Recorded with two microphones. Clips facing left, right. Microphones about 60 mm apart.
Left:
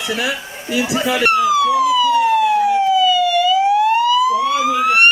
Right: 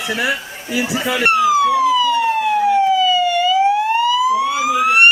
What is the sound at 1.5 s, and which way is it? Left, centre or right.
Police car, right.